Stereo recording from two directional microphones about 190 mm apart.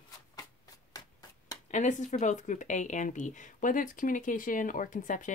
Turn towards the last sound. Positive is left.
turn(degrees=40)  # may be behind; listen again after turning